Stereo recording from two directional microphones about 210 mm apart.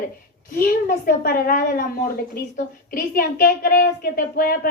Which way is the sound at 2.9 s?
40° left (ahead or behind).